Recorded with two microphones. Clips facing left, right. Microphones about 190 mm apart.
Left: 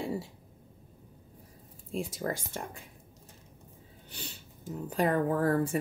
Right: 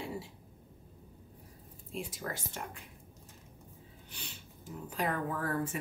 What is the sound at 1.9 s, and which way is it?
Speech, 40° left (ahead or behind).